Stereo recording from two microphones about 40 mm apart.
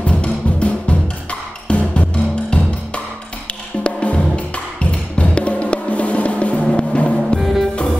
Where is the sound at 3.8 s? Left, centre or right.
Left.